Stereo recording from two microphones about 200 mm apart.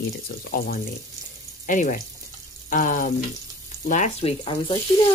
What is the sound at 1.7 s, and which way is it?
Speech, 40° left (ahead or behind).